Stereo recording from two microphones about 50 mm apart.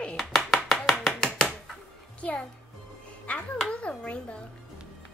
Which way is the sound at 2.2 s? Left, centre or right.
Left.